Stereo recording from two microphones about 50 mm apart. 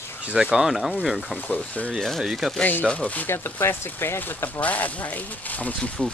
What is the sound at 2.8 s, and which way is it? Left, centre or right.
Speech, left.